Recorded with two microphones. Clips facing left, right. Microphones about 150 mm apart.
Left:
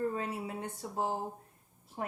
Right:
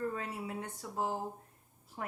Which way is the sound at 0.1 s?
25° left (ahead or behind).